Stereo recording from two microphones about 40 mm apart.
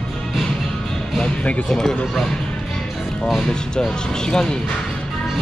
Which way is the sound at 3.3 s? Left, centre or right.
Centre.